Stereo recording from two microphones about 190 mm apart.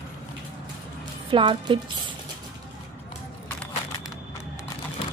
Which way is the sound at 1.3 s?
25° right (ahead or behind).